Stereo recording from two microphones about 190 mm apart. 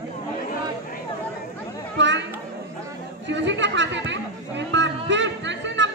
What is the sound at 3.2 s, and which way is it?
Chatter, 70° right (ahead or behind).